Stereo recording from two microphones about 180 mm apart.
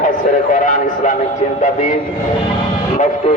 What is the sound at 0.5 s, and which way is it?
Speech, 45° left (ahead or behind).